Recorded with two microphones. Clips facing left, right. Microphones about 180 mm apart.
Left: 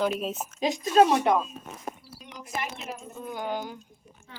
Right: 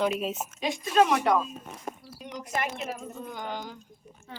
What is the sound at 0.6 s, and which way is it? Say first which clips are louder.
Speech: left 3 dB; 35° left (ahead or behind).